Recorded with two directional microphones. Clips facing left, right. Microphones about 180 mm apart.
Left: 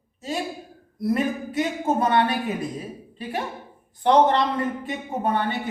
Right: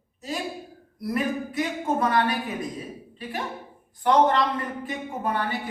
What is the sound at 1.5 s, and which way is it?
Speech, 25° left (ahead or behind).